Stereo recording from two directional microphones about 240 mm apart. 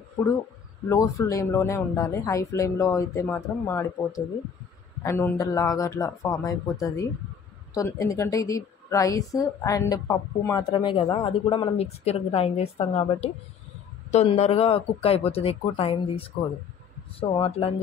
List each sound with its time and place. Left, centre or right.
0.8 s a woman's voice: centre
17.4 s a woman's voice: left